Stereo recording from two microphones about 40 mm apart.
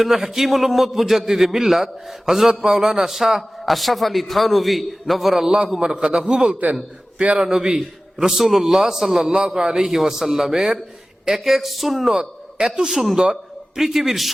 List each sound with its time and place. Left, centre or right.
0.0 s a man's voice: centre
5.8 s a man's voice: centre
8.4 s a man's voice: centre
12.1 s a man's voice: centre